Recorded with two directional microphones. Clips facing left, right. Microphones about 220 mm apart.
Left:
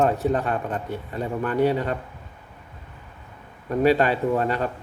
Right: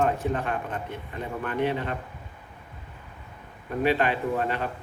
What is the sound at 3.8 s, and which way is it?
Speech, 40° left (ahead or behind).